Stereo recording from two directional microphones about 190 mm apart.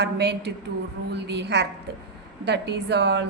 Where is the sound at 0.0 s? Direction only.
60° right (ahead or behind).